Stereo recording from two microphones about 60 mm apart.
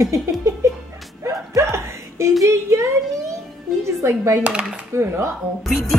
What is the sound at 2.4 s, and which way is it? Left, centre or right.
Speech, right.